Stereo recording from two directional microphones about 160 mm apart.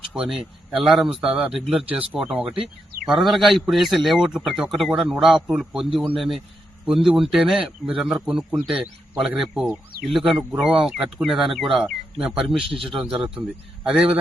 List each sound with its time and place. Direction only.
0.1 s a man's voice: 5° right (ahead or behind)